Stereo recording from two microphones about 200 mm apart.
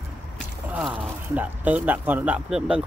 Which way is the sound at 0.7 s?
5° right (ahead or behind).